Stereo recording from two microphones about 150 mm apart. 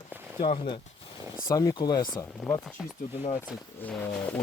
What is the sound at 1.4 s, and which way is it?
Speech, 25° left (ahead or behind).